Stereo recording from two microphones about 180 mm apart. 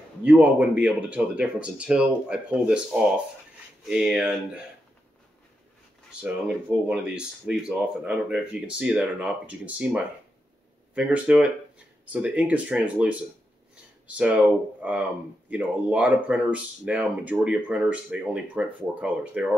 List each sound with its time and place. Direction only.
0.2 s speech: 5° right (ahead or behind)
6.2 s speech: 5° right (ahead or behind)